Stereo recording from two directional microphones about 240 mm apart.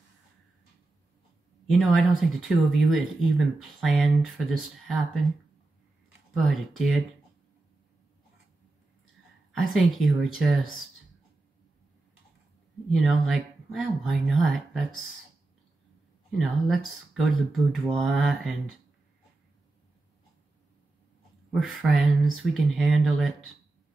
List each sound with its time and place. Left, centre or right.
1.7 s speech: centre
6.3 s speech: centre
9.5 s speech: centre
12.9 s speech: centre
16.3 s speech: centre
21.5 s speech: centre